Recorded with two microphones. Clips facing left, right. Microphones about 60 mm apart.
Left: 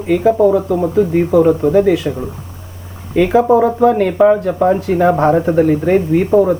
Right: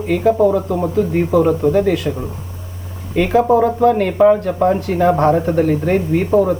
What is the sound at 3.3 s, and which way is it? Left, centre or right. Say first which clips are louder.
Speech: left 1 dB; centre.